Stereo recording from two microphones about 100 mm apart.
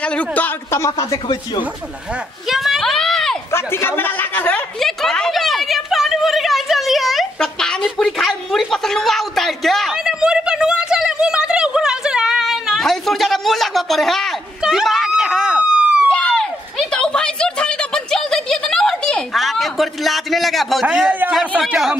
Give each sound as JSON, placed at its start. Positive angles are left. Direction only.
{"t": 0.0, "sound": "speech", "side_deg": 10}
{"t": 0.7, "sound": "speech", "side_deg": 30}
{"t": 1.1, "sound": "speech", "side_deg": 50}
{"t": 2.4, "sound": "a sound", "side_deg": -5}
{"t": 3.5, "sound": "speech", "side_deg": 25}
{"t": 4.7, "sound": "a sound", "side_deg": 5}
{"t": 14.6, "sound": "police car", "side_deg": -5}
{"t": 16.1, "sound": "a sound", "side_deg": 10}
{"t": 20.8, "sound": "a man's voice", "side_deg": -10}